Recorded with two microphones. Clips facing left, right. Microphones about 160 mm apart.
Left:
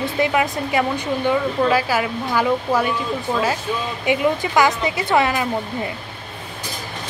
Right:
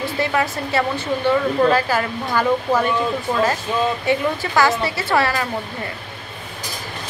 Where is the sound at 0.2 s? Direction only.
15° left (ahead or behind).